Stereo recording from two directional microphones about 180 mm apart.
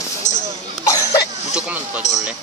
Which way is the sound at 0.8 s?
20° left (ahead or behind).